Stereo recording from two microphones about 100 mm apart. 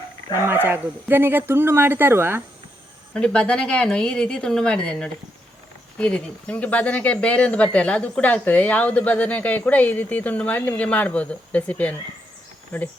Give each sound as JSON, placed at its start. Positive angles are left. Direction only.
{"t": 0.3, "sound": "speech", "side_deg": -25}
{"t": 3.2, "sound": "speech", "side_deg": 10}